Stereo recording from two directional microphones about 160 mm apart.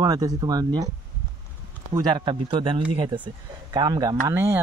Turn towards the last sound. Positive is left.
turn(degrees=-15)  # may be behind; listen again after turning